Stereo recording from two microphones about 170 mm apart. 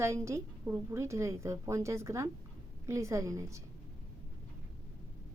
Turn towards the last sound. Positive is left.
turn(degrees=-15)  # may be behind; listen again after turning